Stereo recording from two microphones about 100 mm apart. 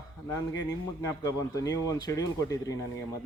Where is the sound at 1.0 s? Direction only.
35° left (ahead or behind).